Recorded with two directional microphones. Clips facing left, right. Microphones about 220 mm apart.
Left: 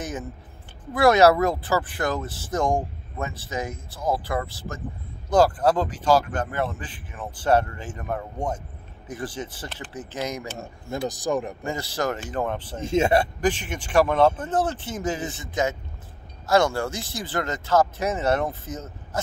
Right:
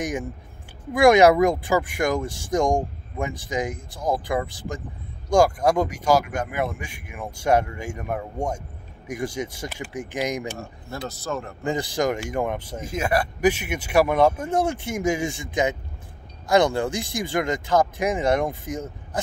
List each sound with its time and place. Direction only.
0.0 s speech: 15° right (ahead or behind)
10.6 s speech: 15° left (ahead or behind)
11.6 s speech: 15° right (ahead or behind)
12.8 s speech: 25° left (ahead or behind)
13.4 s speech: 10° right (ahead or behind)